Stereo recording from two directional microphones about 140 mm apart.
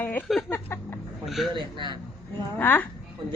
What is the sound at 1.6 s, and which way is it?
Speech, 35° right (ahead or behind).